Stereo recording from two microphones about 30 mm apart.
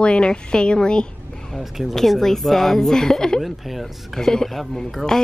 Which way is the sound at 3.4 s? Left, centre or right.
Centre.